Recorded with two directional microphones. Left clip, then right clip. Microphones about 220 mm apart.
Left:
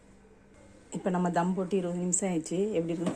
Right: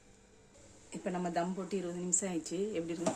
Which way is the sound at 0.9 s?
15° left (ahead or behind).